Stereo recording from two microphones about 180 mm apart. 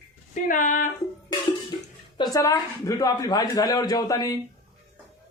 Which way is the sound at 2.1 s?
20° left (ahead or behind).